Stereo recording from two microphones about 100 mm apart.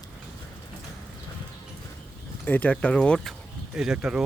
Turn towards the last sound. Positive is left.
turn(degrees=-10)  # may be behind; listen again after turning